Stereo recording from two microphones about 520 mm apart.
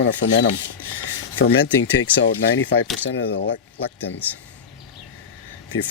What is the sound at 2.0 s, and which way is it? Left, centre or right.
Speech, centre.